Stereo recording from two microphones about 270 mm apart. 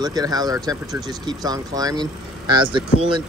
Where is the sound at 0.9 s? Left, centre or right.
Centre.